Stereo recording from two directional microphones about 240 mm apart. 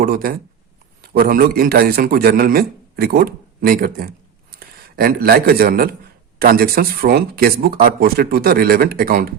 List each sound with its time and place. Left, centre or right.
0.0 s a man's voice: right